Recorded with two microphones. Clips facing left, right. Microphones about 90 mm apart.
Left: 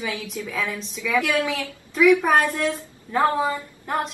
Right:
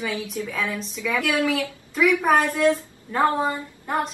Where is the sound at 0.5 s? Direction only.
Centre (ahead or behind).